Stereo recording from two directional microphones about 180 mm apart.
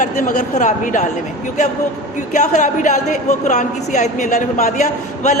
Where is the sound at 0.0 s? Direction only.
45° left (ahead or behind).